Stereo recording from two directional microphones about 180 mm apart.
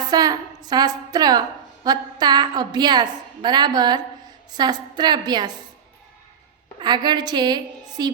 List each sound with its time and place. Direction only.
0.0 s a woman's voice: 20° right (ahead or behind)
6.7 s a woman's voice: 25° right (ahead or behind)